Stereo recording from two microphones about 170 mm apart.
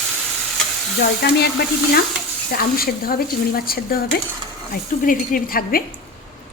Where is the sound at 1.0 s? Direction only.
70° left (ahead or behind).